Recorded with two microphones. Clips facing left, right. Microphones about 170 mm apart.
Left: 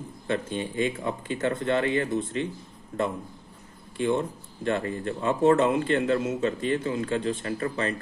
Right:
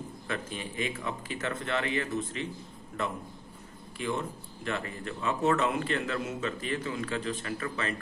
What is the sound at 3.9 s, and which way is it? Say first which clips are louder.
A man's voice: left 7 dB; 30° left (ahead or behind).